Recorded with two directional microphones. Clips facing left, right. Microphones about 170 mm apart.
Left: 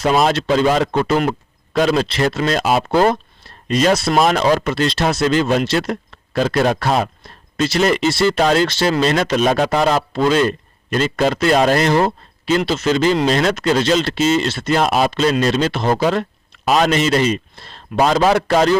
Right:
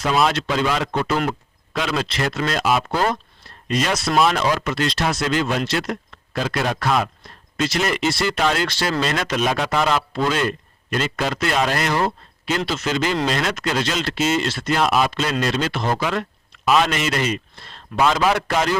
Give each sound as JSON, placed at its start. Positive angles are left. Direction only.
{"t": 0.0, "sound": "speech", "side_deg": 35}
{"t": 1.7, "sound": "speech", "side_deg": 40}
{"t": 6.4, "sound": "speech", "side_deg": 40}
{"t": 8.6, "sound": "speech", "side_deg": 25}
{"t": 14.8, "sound": "speech", "side_deg": 40}